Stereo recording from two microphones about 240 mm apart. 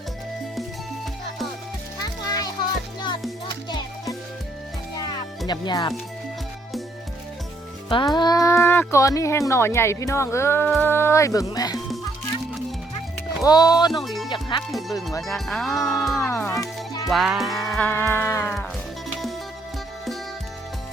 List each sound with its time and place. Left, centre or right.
2.2 s music: centre
3.7 s music: centre
5.5 s speech: centre
7.9 s speech: centre
13.4 s speech: centre
13.9 s music: centre
14.3 s speech: centre
14.7 s music: centre
15.4 s speech: centre
16.1 s music: centre
17.1 s speech: centre